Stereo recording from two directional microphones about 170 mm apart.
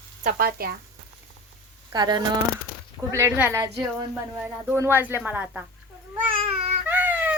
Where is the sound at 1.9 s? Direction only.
25° right (ahead or behind).